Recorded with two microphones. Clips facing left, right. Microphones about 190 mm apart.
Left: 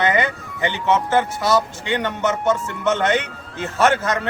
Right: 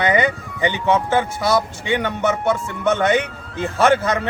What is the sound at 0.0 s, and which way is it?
Speech, 15° right (ahead or behind).